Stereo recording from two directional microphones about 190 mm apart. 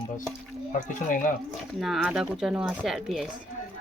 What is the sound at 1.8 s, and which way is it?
Speech, centre (ahead or behind).